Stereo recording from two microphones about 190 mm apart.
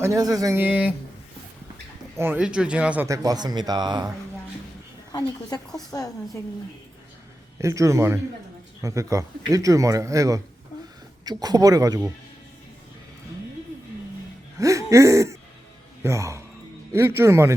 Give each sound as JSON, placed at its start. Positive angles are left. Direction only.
{"t": 0.0, "sound": "a man's voice", "side_deg": -15}
{"t": 2.1, "sound": "a man's voice", "side_deg": -10}
{"t": 5.1, "sound": "a woman's voice", "side_deg": 20}
{"t": 7.6, "sound": "a man's voice", "side_deg": -15}
{"t": 14.6, "sound": "throat clearing", "side_deg": -15}
{"t": 16.0, "sound": "a man's voice", "side_deg": -15}